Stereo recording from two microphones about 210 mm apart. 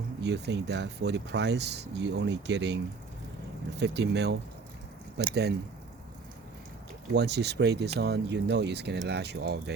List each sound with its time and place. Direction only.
0.2 s speech: 55° right (ahead or behind)
7.1 s speech: 55° right (ahead or behind)